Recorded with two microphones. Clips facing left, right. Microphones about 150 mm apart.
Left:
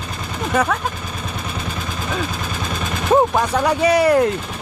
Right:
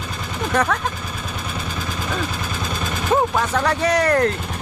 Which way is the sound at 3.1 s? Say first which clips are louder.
Left 4 dB; 15° left (ahead or behind).